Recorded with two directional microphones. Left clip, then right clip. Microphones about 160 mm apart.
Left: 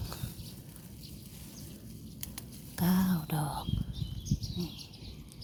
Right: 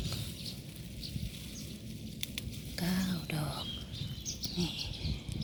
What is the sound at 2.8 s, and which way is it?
Whispering, 30° left (ahead or behind).